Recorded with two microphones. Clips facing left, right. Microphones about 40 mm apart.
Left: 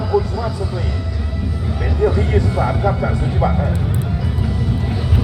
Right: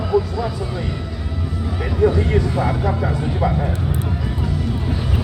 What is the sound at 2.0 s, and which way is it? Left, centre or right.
Music, centre.